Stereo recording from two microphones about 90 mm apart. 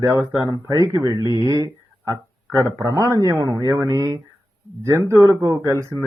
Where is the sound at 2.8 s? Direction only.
40° right (ahead or behind).